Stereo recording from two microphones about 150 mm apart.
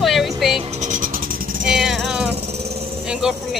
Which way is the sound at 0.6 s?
50° right (ahead or behind).